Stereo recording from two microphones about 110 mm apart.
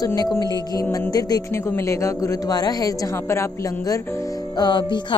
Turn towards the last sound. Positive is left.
turn(degrees=40)  # may be behind; listen again after turning